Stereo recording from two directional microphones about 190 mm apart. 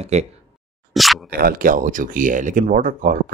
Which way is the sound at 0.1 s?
35° right (ahead or behind).